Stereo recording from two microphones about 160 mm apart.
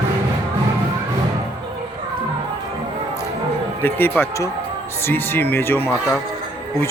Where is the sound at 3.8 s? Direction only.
10° left (ahead or behind).